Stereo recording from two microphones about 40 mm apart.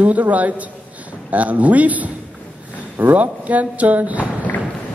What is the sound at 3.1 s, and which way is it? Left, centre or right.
A man's voice, right.